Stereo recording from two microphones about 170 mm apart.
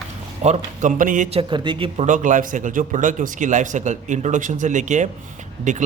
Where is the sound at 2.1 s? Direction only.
50° right (ahead or behind).